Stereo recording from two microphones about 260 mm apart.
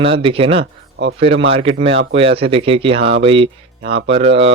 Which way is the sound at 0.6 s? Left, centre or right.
Right.